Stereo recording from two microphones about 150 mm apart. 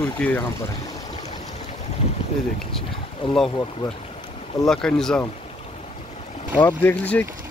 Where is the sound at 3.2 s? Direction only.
35° left (ahead or behind).